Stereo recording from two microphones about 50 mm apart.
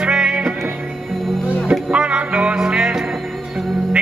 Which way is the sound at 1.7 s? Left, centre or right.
Right.